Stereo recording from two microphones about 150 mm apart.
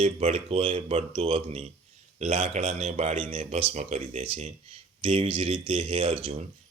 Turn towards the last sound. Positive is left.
turn(degrees=-35)  # may be behind; listen again after turning